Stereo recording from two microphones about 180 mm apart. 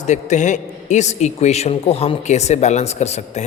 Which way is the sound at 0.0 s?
40° left (ahead or behind).